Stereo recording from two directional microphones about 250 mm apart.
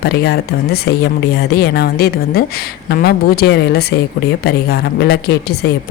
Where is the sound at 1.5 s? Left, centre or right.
Left.